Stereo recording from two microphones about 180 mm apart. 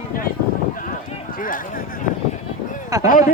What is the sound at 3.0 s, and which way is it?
Speech, 45° left (ahead or behind).